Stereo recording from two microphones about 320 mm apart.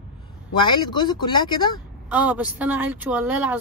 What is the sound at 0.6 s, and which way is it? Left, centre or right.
A woman's voice, centre.